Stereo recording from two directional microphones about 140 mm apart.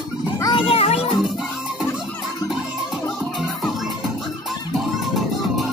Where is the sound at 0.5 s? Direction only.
45° left (ahead or behind).